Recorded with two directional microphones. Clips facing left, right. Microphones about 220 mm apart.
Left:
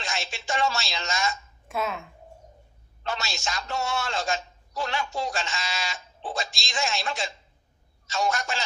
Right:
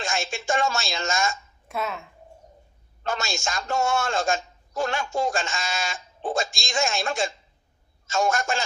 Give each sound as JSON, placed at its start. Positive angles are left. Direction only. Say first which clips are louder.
{"t": 0.0, "sound": "a man's voice", "louder": "right 5 dB", "side_deg": -45}
{"t": 1.6, "sound": "speech", "louder": "even", "side_deg": 0}
{"t": 3.0, "sound": "a man's voice", "louder": "right 3 dB", "side_deg": -45}